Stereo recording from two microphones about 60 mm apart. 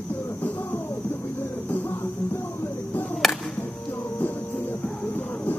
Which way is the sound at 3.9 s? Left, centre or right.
Left.